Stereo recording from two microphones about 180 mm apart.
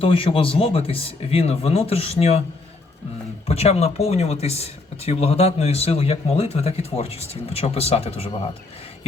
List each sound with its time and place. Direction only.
0.0 s speech: 30° left (ahead or behind)
3.5 s speech: 35° left (ahead or behind)